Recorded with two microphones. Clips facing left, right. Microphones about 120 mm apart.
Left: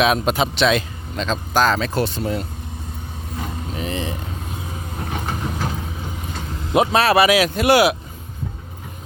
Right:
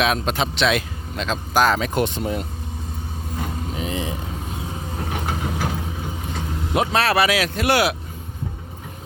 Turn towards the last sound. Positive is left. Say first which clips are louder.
# left 4 dB
turn(degrees=10)  # may be behind; listen again after turning